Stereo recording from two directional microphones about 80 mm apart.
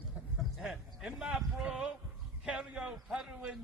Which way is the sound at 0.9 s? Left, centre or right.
Centre.